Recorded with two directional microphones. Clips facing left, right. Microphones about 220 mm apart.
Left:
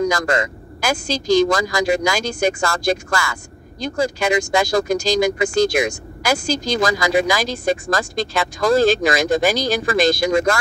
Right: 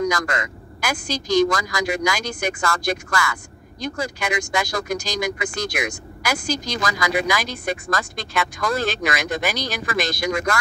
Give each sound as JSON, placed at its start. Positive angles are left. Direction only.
{"t": 0.0, "sound": "speech", "side_deg": 25}